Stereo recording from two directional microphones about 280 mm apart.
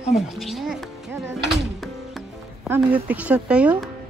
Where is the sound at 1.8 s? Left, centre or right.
Centre.